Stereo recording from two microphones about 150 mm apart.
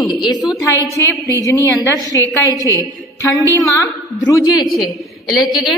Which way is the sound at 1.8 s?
20° left (ahead or behind).